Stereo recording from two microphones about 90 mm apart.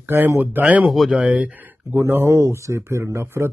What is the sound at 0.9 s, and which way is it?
Speech, 5° right (ahead or behind).